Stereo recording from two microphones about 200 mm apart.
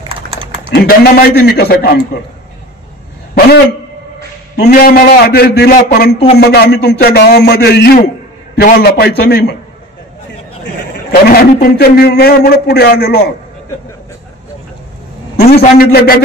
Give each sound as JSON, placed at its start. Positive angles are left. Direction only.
{"t": 0.1, "sound": "typing", "side_deg": -25}
{"t": 0.7, "sound": "a man's voice", "side_deg": 50}
{"t": 4.6, "sound": "a man's voice", "side_deg": 50}
{"t": 11.1, "sound": "a man's voice", "side_deg": 50}
{"t": 15.3, "sound": "a man's voice", "side_deg": 50}